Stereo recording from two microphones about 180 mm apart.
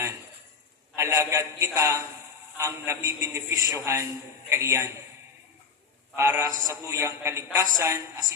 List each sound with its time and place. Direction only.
0.9 s a man's voice: 15° right (ahead or behind)
6.1 s speech: 15° right (ahead or behind)